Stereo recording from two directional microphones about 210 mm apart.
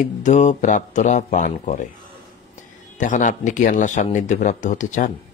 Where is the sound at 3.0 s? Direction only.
35° left (ahead or behind).